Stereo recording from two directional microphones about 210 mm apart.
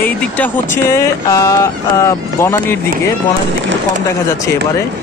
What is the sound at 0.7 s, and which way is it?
Speech, 15° left (ahead or behind).